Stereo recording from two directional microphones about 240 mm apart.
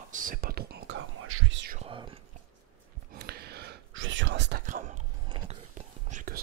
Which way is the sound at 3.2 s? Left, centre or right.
Right.